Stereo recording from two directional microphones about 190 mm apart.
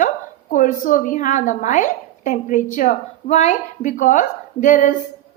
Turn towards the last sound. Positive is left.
turn(degrees=40)  # may be behind; listen again after turning